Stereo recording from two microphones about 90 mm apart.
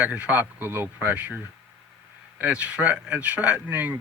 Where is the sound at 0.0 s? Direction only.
15° right (ahead or behind).